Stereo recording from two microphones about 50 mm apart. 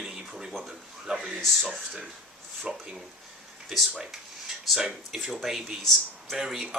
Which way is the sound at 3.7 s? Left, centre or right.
Centre.